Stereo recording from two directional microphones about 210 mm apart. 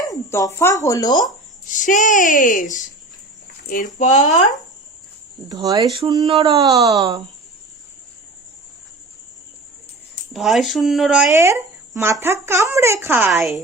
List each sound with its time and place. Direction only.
0.0 s speech: 15° left (ahead or behind)
1.7 s a child's voice: 35° left (ahead or behind)
5.5 s speech: 20° right (ahead or behind)
10.3 s speech: centre (ahead or behind)
11.3 s speech: 15° right (ahead or behind)